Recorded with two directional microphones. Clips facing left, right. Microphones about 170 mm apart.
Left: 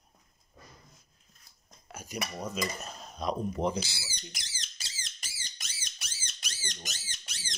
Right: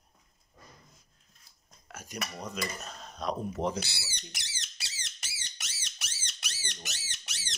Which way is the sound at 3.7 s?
65° right (ahead or behind).